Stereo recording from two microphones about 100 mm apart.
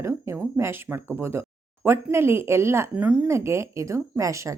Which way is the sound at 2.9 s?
10° right (ahead or behind).